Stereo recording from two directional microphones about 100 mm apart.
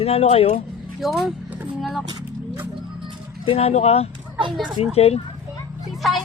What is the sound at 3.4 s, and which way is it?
Speech, 80° left.